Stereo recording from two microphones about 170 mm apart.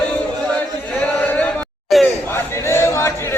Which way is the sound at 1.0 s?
10° left (ahead or behind).